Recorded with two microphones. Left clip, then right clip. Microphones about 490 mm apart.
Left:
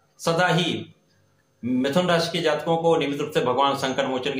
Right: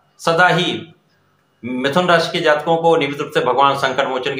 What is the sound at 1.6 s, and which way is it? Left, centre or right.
Speech, left.